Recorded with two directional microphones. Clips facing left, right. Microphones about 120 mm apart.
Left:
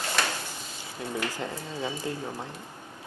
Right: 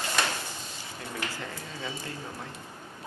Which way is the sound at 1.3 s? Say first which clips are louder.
Left 4 dB; 20° left (ahead or behind).